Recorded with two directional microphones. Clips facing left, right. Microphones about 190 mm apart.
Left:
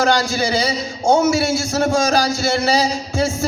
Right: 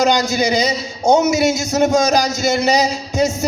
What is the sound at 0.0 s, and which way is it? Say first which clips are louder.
A man's voice: right 2 dB; 20° right (ahead or behind).